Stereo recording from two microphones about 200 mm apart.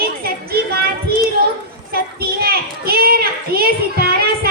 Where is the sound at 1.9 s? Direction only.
50° right (ahead or behind).